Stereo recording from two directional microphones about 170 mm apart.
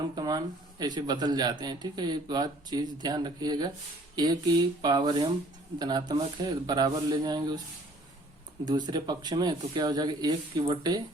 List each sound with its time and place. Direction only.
0.2 s a man's voice: 25° right (ahead or behind)
8.6 s a man's voice: 25° right (ahead or behind)